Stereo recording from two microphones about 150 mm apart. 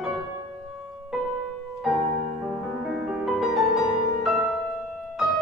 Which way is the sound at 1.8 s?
5° right (ahead or behind).